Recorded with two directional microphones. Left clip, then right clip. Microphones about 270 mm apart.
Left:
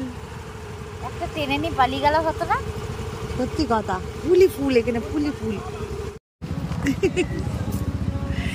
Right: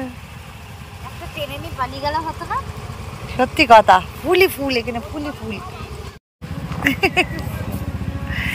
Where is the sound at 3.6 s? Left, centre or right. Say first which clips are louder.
Right 15 dB; right.